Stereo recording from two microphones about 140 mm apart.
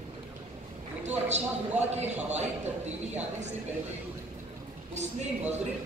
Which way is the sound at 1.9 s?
50° right (ahead or behind).